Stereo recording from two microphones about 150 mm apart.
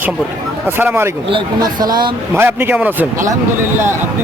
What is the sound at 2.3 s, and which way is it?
A man's voice, 10° right (ahead or behind).